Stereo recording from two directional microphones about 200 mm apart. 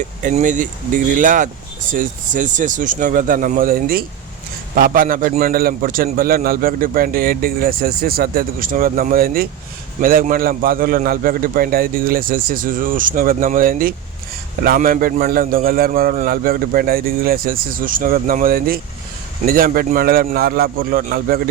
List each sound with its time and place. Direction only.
0.2 s a man's voice: 40° right (ahead or behind)